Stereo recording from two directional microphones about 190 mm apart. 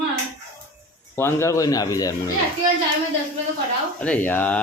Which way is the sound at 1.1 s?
15° left (ahead or behind).